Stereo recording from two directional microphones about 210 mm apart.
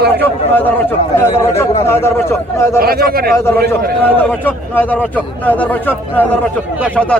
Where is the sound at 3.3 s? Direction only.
10° left (ahead or behind).